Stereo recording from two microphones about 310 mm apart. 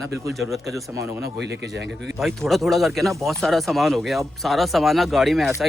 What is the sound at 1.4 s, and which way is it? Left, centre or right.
Speech, right.